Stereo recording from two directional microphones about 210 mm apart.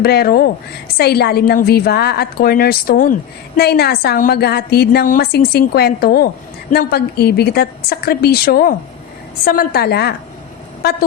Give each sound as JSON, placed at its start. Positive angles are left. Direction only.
{"t": 0.0, "sound": "a woman's voice", "side_deg": 50}